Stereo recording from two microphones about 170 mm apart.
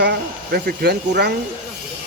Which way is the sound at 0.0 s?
70° right (ahead or behind).